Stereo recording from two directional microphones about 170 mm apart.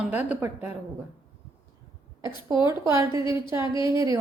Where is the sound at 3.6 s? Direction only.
30° left (ahead or behind).